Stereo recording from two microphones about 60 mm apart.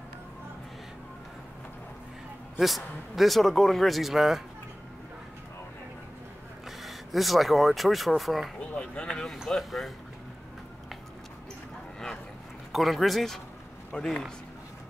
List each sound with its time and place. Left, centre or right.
2.6 s speech: centre
6.8 s speech: centre
8.5 s speech: centre
9.0 s speech: centre
12.7 s speech: centre
13.9 s speech: centre